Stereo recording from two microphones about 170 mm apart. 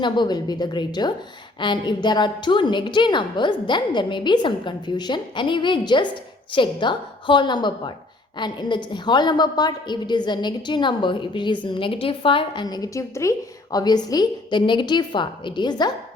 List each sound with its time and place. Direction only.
0.0 s a woman's voice: 25° left (ahead or behind)